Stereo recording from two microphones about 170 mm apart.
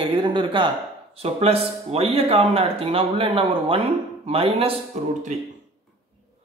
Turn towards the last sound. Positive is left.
turn(degrees=-45)  # may be behind; listen again after turning